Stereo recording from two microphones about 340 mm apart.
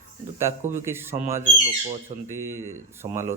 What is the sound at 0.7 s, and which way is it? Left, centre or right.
Speech, centre.